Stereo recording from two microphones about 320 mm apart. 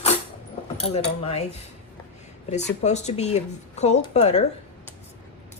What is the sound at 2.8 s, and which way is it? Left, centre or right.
A woman's voice, left.